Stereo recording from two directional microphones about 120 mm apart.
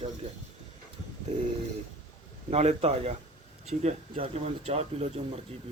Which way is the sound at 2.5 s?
60° right (ahead or behind).